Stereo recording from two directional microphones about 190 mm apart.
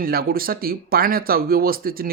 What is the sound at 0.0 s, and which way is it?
Speech, 50° right (ahead or behind).